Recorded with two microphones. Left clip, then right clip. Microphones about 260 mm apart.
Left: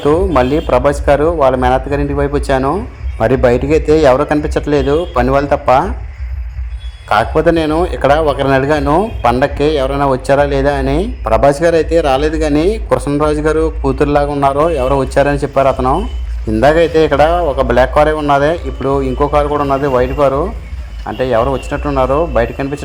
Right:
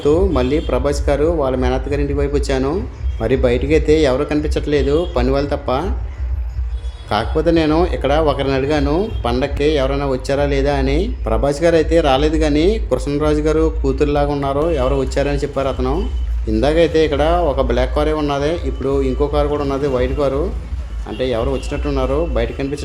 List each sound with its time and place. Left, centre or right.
0.0 s a man's voice: centre
7.1 s a man's voice: centre